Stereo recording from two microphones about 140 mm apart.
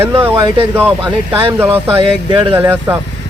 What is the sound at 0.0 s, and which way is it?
Speech, 15° right (ahead or behind).